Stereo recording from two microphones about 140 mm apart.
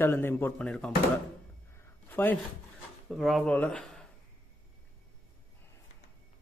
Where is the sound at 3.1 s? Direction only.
Centre (ahead or behind).